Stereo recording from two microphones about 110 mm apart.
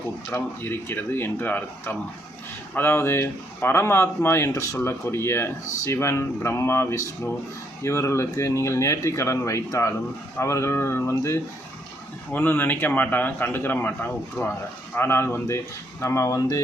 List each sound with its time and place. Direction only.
0.3 s speech: 20° left (ahead or behind)
12.3 s a man's voice: 15° left (ahead or behind)